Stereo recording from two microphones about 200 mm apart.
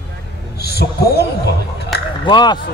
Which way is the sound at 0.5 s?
55° left (ahead or behind).